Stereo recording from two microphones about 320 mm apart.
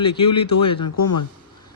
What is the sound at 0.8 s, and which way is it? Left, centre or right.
Speech, left.